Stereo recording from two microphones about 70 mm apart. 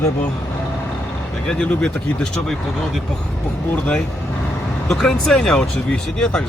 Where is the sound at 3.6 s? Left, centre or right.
Left.